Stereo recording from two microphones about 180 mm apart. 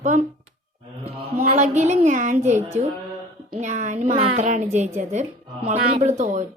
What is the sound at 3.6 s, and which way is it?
A woman's voice, 40° right (ahead or behind).